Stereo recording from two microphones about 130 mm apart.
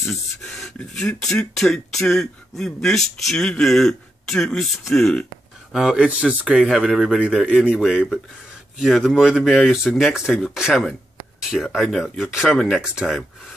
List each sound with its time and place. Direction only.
0.0 s speech: centre (ahead or behind)